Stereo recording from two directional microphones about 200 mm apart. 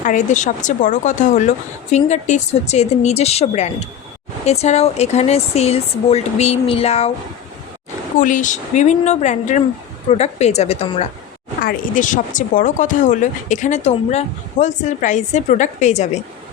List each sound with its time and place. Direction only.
0.0 s speech: 40° left (ahead or behind)
8.2 s speech: 40° left (ahead or behind)